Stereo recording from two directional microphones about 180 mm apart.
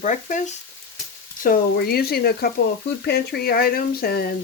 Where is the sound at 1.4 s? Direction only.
55° left (ahead or behind).